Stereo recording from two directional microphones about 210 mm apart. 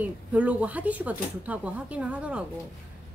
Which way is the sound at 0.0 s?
5° right (ahead or behind).